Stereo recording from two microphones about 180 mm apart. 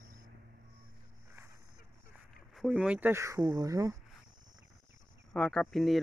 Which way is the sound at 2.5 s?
5° right (ahead or behind).